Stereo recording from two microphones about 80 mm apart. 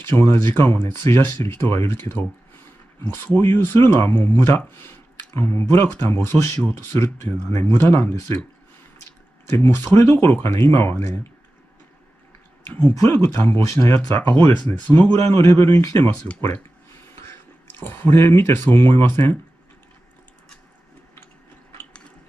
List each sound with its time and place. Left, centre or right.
0.1 s speech: left
9.5 s speech: left
12.8 s speech: left
13.3 s speech: left
15.2 s speech: left